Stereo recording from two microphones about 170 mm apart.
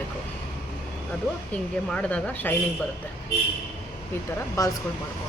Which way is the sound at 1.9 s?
5° left (ahead or behind).